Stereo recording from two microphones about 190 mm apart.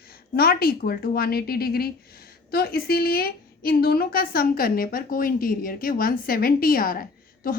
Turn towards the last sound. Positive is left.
turn(degrees=50)  # may be behind; listen again after turning